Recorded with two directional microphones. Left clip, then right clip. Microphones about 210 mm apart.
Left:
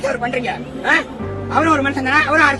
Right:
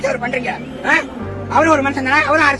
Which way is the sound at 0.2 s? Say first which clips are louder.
Even; 15° left (ahead or behind).